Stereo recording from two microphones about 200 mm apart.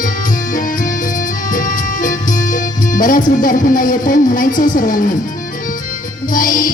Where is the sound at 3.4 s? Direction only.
45° left (ahead or behind).